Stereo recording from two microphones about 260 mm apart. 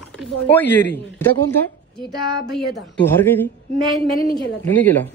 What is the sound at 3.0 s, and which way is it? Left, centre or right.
Speech, centre.